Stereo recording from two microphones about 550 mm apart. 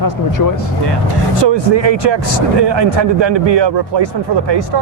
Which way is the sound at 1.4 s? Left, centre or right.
Right.